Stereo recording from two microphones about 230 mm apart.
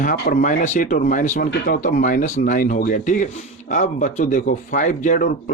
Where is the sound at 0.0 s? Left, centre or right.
Left.